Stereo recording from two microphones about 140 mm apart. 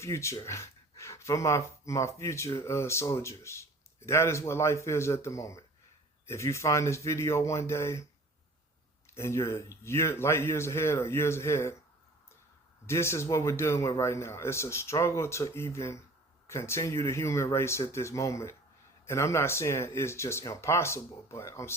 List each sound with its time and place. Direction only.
0.0 s speech: 20° left (ahead or behind)
9.1 s speech: 20° left (ahead or behind)
12.9 s speech: 20° left (ahead or behind)